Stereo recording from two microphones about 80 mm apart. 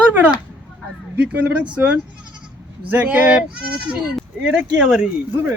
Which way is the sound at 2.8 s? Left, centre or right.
Centre.